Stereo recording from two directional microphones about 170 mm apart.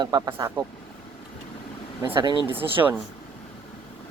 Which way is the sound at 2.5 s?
10° right (ahead or behind).